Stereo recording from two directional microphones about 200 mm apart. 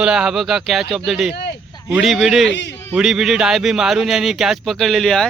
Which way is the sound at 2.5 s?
60° left (ahead or behind).